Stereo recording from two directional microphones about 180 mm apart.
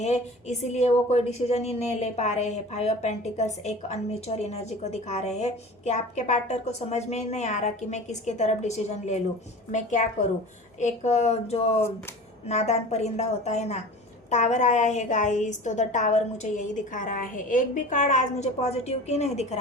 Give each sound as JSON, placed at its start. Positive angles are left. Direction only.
{"t": 0.0, "sound": "speech", "side_deg": 40}